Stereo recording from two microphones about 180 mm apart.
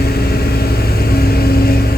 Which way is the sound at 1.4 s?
60° left (ahead or behind).